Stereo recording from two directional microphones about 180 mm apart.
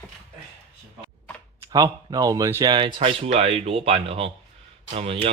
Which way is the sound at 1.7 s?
20° right (ahead or behind).